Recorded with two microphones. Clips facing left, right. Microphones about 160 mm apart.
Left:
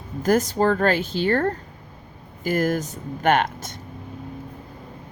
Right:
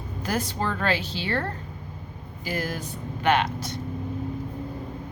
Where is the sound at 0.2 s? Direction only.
45° left (ahead or behind).